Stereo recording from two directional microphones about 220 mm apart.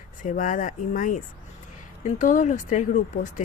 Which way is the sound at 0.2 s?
35° left (ahead or behind).